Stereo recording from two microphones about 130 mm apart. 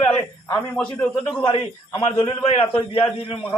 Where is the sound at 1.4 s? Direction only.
40° left (ahead or behind).